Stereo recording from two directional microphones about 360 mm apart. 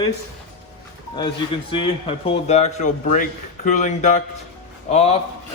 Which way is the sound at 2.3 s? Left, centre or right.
Centre.